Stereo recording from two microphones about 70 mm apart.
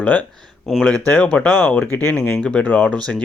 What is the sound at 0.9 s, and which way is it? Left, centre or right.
Speech, centre.